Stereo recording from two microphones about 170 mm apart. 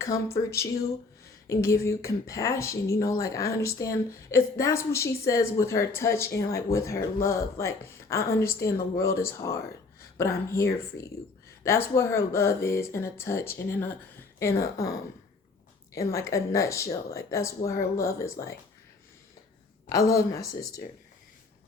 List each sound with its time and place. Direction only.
0.0 s speech: 15° left (ahead or behind)
16.0 s speech: 20° left (ahead or behind)
19.9 s speech: 20° left (ahead or behind)